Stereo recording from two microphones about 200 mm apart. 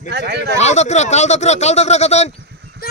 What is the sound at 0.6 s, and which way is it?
Speech, 35° left (ahead or behind).